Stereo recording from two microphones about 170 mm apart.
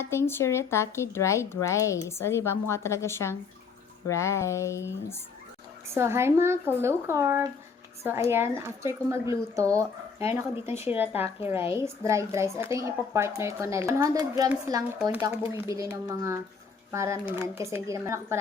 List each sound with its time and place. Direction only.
0.0 s a woman's voice: 15° left (ahead or behind)
5.9 s a woman's voice: 15° right (ahead or behind)